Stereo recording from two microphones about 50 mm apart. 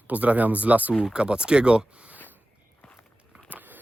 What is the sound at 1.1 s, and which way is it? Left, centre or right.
Speech, centre.